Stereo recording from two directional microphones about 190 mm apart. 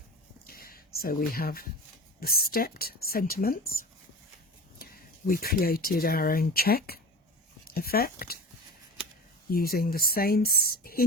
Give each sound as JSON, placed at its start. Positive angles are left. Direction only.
{"t": 0.4, "sound": "a sound", "side_deg": 50}
{"t": 2.2, "sound": "speech", "side_deg": 55}
{"t": 4.8, "sound": "speech", "side_deg": 50}
{"t": 9.5, "sound": "speech", "side_deg": 50}